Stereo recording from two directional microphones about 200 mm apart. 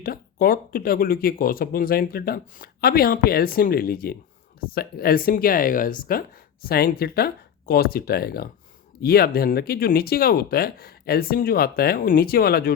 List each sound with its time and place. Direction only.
0.0 s speech: 45° left (ahead or behind)